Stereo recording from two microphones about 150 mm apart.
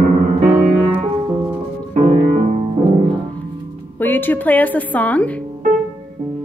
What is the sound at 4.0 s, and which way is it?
A woman's voice, 10° left (ahead or behind).